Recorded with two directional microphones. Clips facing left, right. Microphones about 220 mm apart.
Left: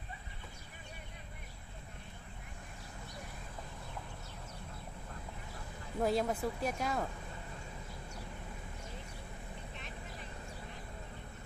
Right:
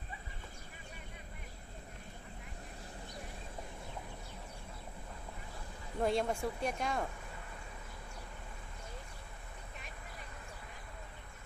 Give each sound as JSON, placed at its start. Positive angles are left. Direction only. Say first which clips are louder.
{"t": 6.0, "sound": "speech", "louder": "left 1 dB", "side_deg": 5}